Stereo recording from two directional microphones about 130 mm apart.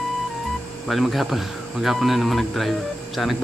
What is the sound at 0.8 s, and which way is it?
Speech, centre (ahead or behind).